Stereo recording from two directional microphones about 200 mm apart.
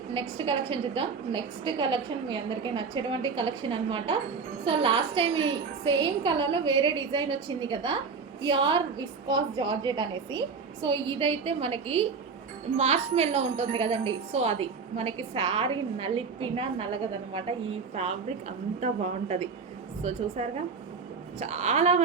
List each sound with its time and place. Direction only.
0.1 s a woman's voice: 25° right (ahead or behind)
20.0 s a woman's voice: 35° right (ahead or behind)